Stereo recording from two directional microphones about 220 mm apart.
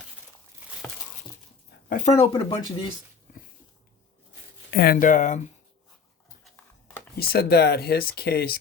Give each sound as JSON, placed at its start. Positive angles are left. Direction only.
{"t": 1.9, "sound": "speech", "side_deg": 35}
{"t": 4.7, "sound": "speech", "side_deg": 45}
{"t": 7.2, "sound": "speech", "side_deg": 45}